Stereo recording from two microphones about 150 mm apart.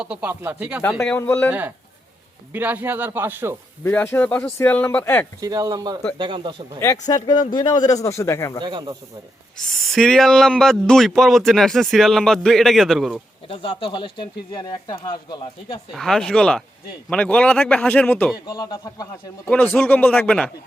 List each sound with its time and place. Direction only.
0.0 s speech: 10° right (ahead or behind)
0.8 s speech: 15° left (ahead or behind)
2.5 s speech: 10° right (ahead or behind)
3.8 s speech: 15° left (ahead or behind)
5.4 s speech: 25° right (ahead or behind)
7.3 s speech: 30° left (ahead or behind)
8.6 s speech: 30° right (ahead or behind)
9.6 s speech: 5° left (ahead or behind)
13.5 s speech: 35° left (ahead or behind)
15.9 s speech: 5° left (ahead or behind)
18.4 s speech: 25° left (ahead or behind)
19.5 s speech: 10° left (ahead or behind)